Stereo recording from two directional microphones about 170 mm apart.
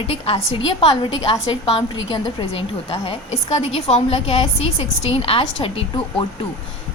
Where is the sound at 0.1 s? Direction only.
35° left (ahead or behind).